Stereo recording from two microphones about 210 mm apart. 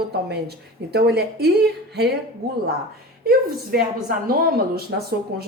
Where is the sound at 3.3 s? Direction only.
45° right (ahead or behind).